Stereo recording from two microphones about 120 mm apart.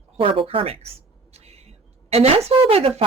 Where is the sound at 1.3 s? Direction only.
60° right (ahead or behind).